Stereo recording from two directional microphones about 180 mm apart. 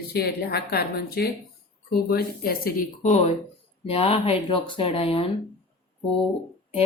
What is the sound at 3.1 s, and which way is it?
A woman's voice, 35° left (ahead or behind).